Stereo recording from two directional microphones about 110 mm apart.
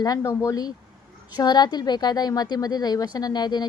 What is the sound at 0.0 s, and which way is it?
A woman's voice, 30° left (ahead or behind).